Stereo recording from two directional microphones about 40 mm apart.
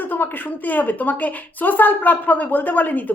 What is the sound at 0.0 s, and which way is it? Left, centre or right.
A woman's voice, left.